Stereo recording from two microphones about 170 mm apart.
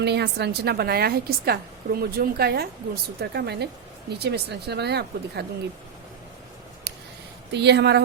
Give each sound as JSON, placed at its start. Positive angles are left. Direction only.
{"t": 0.0, "sound": "a woman's voice", "side_deg": -75}
{"t": 6.9, "sound": "a sound", "side_deg": -80}
{"t": 7.5, "sound": "speech", "side_deg": -80}